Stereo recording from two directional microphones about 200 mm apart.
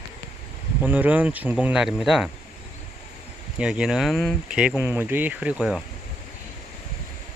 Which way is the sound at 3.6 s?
5° right (ahead or behind).